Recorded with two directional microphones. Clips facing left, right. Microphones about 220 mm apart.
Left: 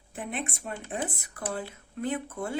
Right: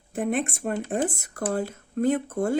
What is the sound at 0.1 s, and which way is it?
Speech, 45° right (ahead or behind).